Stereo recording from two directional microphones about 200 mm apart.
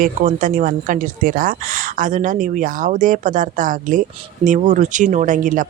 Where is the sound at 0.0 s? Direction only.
40° right (ahead or behind).